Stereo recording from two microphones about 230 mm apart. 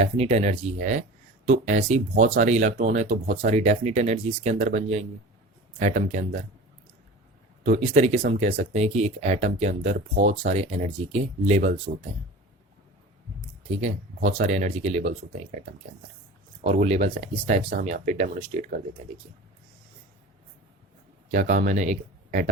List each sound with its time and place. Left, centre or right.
0.0 s speech: right
7.6 s speech: right
14.3 s speech: right
16.6 s speech: right
21.3 s speech: right